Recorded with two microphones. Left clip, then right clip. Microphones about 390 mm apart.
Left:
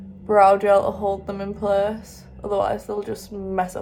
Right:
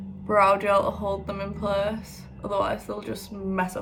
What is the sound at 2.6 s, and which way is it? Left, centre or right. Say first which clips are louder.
Speech: left 4 dB; centre.